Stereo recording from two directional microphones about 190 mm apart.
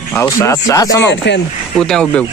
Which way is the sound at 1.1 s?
65° left (ahead or behind).